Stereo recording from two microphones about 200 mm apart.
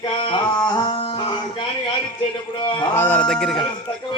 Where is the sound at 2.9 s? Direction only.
10° left (ahead or behind).